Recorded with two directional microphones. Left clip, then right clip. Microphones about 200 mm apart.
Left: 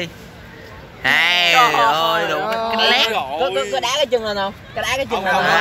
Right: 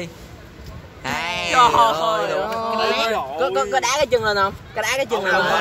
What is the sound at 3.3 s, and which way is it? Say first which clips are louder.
Speech: left 1 dB; 40° right (ahead or behind).